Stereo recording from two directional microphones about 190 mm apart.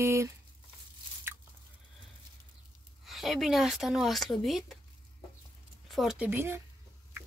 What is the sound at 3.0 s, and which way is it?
A woman's voice, centre (ahead or behind).